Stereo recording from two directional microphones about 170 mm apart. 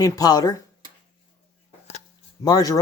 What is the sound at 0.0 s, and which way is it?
Speech, 20° left (ahead or behind).